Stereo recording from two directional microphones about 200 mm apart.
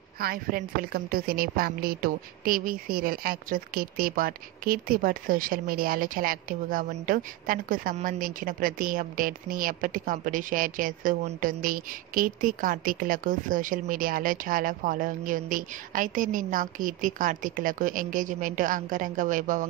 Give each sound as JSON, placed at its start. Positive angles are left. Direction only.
{"t": 0.2, "sound": "a woman's voice", "side_deg": -45}